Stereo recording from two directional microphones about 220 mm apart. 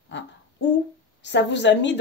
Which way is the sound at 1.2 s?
55° left (ahead or behind).